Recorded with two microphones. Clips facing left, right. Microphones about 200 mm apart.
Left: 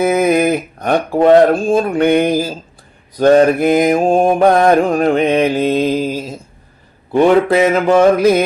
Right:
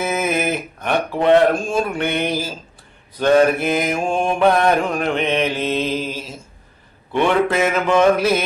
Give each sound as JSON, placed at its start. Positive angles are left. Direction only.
{"t": 0.0, "sound": "speech", "side_deg": 40}
{"t": 4.3, "sound": "mantra", "side_deg": 45}
{"t": 7.1, "sound": "speech", "side_deg": 40}